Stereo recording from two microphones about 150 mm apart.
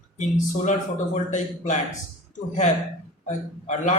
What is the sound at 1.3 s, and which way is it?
Speech, 55° left (ahead or behind).